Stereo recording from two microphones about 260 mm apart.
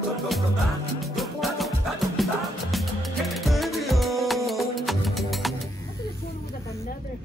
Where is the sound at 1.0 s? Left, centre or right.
Centre.